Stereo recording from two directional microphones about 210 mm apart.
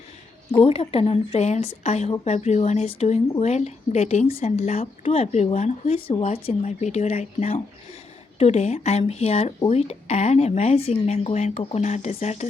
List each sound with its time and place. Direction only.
0.6 s a woman's voice: 30° left (ahead or behind)